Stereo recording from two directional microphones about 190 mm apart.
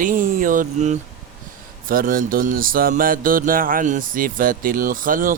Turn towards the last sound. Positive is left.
turn(degrees=-45)  # may be behind; listen again after turning